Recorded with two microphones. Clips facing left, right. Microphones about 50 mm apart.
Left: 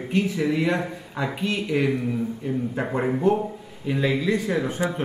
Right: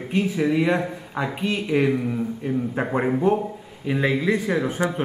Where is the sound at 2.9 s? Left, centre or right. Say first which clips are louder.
Right 1 dB; centre.